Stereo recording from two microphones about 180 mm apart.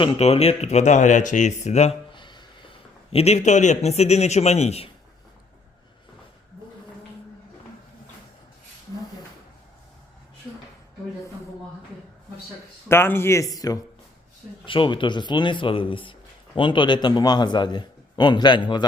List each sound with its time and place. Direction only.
0.0 s speech: 30° left (ahead or behind)
12.9 s a man's voice: 15° left (ahead or behind)